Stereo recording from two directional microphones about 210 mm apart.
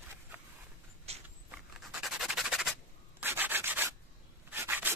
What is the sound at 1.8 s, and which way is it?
Rub, centre (ahead or behind).